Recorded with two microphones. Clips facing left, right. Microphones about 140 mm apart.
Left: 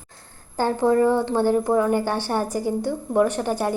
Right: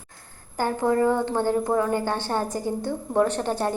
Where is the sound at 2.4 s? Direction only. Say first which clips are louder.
Left 3 dB; 20° right (ahead or behind).